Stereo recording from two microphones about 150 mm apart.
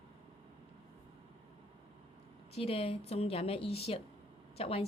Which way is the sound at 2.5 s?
40° left (ahead or behind).